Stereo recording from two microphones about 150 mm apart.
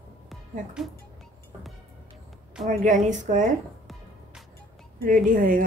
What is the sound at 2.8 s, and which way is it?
Speech, 55° right (ahead or behind).